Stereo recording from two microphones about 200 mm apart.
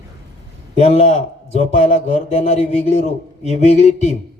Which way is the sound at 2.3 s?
30° left (ahead or behind).